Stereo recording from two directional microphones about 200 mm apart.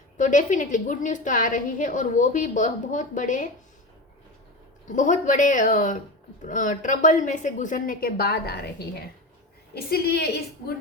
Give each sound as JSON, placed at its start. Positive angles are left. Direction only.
{"t": 0.2, "sound": "a woman's voice", "side_deg": 40}
{"t": 4.9, "sound": "a woman's voice", "side_deg": 40}